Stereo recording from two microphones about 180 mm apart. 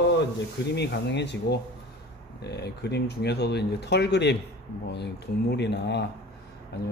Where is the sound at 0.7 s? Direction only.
70° left (ahead or behind).